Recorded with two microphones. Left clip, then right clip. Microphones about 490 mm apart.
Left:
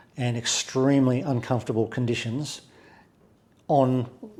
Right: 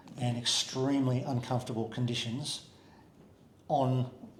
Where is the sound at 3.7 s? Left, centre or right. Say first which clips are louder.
Left 8 dB; left.